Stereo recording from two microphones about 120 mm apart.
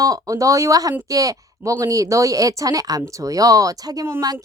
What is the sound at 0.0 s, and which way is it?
Speech, 30° right (ahead or behind).